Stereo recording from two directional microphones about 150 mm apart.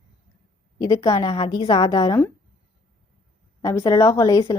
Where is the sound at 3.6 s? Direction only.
20° left (ahead or behind).